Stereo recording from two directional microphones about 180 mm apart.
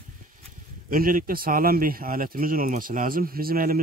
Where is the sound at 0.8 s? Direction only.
50° right (ahead or behind).